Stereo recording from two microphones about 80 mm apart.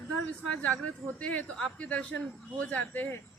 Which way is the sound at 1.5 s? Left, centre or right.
Centre.